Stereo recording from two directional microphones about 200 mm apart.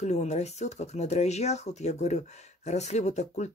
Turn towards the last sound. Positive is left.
turn(degrees=35)  # may be behind; listen again after turning